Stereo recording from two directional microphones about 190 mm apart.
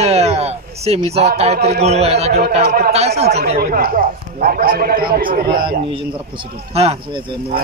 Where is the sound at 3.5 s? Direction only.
50° right (ahead or behind).